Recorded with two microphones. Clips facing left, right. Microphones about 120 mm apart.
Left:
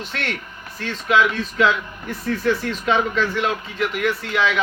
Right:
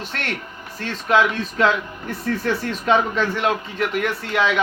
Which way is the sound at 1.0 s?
45° right (ahead or behind).